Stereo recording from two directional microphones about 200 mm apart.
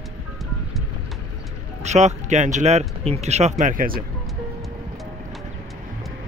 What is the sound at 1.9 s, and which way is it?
Speech, 35° right (ahead or behind).